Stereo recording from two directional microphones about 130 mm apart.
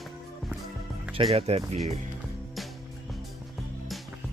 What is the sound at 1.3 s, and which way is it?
Speech, 55° right (ahead or behind).